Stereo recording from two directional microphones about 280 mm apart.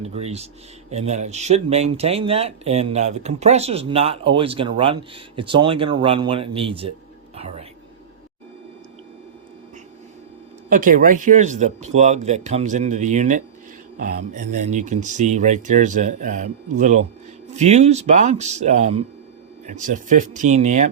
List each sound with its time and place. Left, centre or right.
0.0 s speech: right
10.7 s speech: right